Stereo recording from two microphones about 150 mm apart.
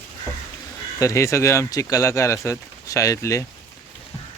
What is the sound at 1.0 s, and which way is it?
Speech, 20° left (ahead or behind).